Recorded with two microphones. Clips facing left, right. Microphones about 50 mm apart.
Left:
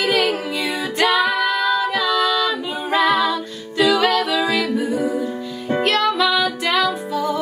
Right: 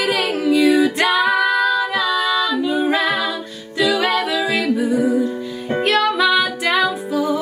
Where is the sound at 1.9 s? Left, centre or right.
Centre.